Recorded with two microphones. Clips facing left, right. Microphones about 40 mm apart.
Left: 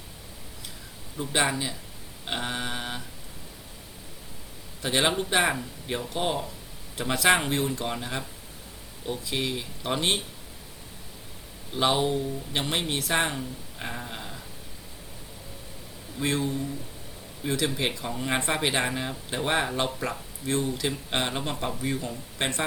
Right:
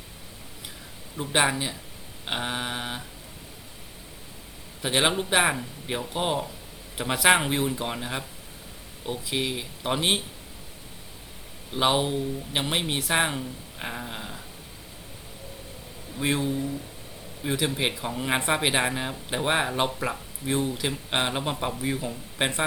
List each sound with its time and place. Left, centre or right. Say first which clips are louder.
1.1 s speech: right 2 dB; centre
4.8 s speech: right 1 dB; centre
11.7 s speech: right 1 dB; centre
16.1 s speech: right 1 dB; centre